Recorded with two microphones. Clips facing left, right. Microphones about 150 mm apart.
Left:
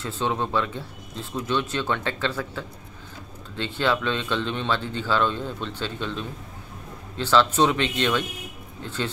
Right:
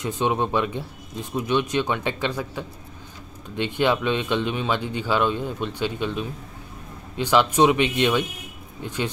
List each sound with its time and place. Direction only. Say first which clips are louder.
0.0 s speech: right 3 dB; 15° right (ahead or behind)